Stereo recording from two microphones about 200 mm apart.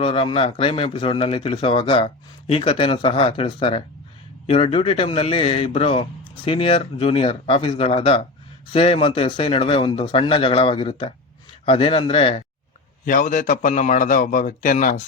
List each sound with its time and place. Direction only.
0.0 s speech: 25° left (ahead or behind)
13.1 s a man's voice: 40° left (ahead or behind)